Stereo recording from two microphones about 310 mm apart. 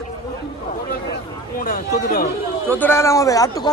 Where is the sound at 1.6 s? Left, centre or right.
Left.